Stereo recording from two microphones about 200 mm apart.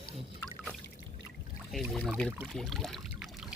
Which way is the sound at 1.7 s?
Centre (ahead or behind).